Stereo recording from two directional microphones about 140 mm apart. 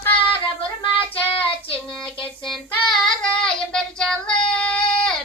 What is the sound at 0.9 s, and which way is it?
Child singing, 40° left (ahead or behind).